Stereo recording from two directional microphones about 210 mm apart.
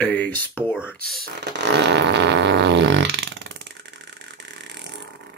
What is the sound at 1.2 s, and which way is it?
Fart, 55° right (ahead or behind).